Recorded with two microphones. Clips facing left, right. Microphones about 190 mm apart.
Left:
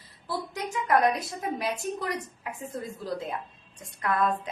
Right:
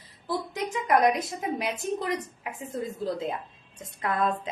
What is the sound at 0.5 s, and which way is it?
Speech, 20° right (ahead or behind).